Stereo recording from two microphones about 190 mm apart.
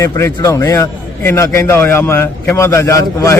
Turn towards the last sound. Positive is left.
turn(degrees=15)  # may be behind; listen again after turning